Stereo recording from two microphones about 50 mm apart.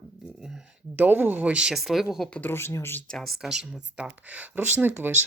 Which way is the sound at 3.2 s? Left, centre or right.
Centre.